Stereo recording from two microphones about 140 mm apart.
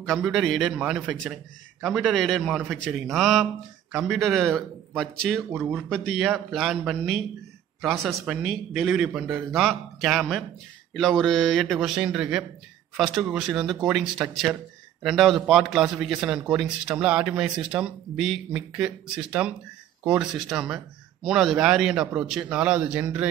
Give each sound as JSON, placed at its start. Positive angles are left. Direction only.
{"t": 0.0, "sound": "a man's voice", "side_deg": 0}
{"t": 5.5, "sound": "speech", "side_deg": -15}
{"t": 5.9, "sound": "a man's voice", "side_deg": 0}